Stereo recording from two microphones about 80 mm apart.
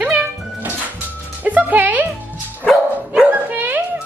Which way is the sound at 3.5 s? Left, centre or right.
Right.